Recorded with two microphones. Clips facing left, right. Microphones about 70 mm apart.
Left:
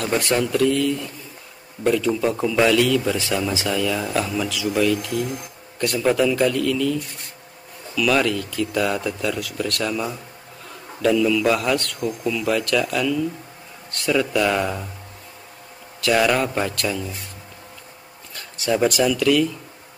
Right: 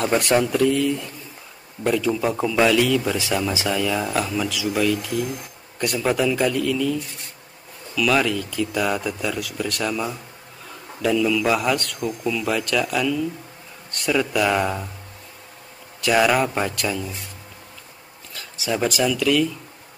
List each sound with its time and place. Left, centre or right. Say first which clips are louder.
0.1 s speech: even; centre
16.0 s speech: even; centre
18.3 s speech: left 3 dB; centre